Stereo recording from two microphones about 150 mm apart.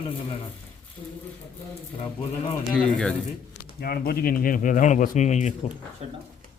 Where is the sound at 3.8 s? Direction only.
90° left; by 5.7 s 55° left (ahead or behind).